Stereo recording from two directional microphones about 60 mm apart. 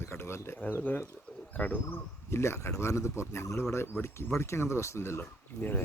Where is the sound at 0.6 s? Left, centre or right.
Left.